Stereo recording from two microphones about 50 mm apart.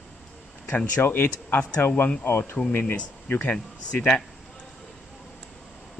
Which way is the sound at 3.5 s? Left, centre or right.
Left.